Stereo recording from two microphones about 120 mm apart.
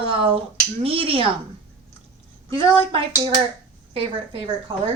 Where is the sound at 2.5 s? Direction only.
50° right (ahead or behind).